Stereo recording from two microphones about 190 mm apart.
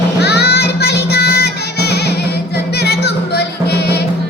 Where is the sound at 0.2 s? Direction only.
60° left (ahead or behind).